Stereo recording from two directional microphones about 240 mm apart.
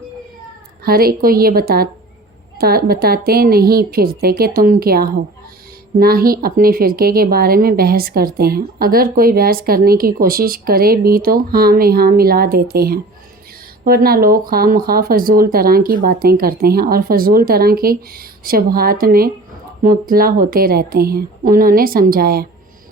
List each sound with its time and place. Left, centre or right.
0.9 s speech: right